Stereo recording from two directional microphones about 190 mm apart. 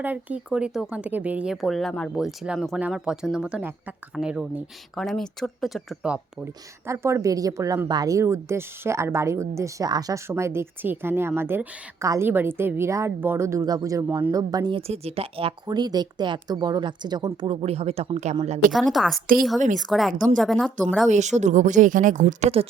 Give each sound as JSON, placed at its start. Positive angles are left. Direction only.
{"t": 0.0, "sound": "speech", "side_deg": -10}
{"t": 18.7, "sound": "speech", "side_deg": 0}
{"t": 21.1, "sound": "speech", "side_deg": -40}